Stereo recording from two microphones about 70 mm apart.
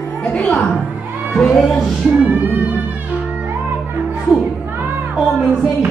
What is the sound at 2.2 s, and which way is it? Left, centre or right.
Music, right.